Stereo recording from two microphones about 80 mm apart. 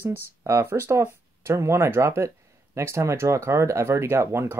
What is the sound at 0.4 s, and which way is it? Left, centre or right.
Speech, right.